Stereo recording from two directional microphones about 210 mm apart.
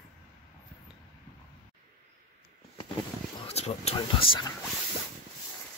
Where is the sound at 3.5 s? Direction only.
30° left (ahead or behind).